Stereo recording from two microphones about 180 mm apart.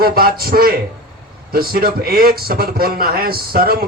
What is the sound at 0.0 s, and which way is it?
A man's voice, 55° right (ahead or behind).